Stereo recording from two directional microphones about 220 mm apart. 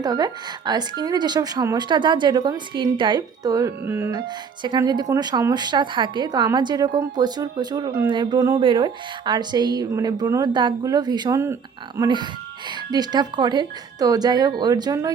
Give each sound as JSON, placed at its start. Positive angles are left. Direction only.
{"t": 0.0, "sound": "a woman's voice", "side_deg": -20}